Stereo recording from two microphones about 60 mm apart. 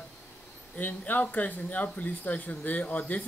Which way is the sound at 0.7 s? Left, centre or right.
Left.